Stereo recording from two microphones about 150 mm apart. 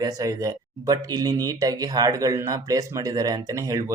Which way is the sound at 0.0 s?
25° right (ahead or behind).